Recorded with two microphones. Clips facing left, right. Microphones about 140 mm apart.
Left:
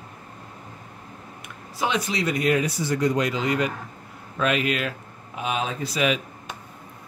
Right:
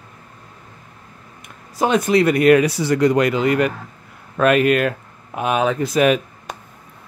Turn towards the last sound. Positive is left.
turn(degrees=-50)  # may be behind; listen again after turning